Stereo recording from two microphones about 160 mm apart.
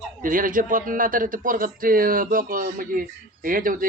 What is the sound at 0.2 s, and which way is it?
A man's voice, 60° right (ahead or behind).